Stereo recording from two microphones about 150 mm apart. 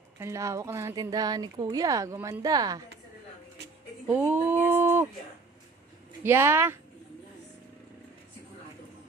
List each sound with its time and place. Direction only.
0.2 s speech: 20° right (ahead or behind)
4.0 s speech: 10° right (ahead or behind)
6.2 s speech: 15° right (ahead or behind)